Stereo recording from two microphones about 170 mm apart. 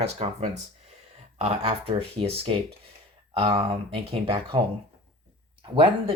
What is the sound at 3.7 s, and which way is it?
Speech, 35° right (ahead or behind).